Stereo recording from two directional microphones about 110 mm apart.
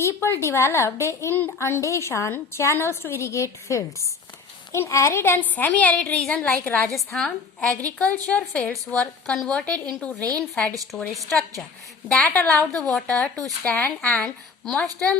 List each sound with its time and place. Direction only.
0.0 s a woman's voice: 25° left (ahead or behind); by 7.7 s 5° left (ahead or behind)
7.7 s a woman's voice: 30° right (ahead or behind)
7.9 s a woman's voice: 10° left (ahead or behind)
11.1 s a woman's voice: centre (ahead or behind)
12.0 s a woman's voice: 15° left (ahead or behind)